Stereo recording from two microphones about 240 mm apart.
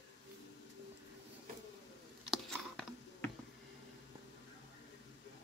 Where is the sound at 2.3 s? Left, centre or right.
Centre.